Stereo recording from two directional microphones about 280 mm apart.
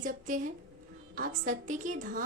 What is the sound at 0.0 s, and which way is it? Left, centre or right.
Child singing, right.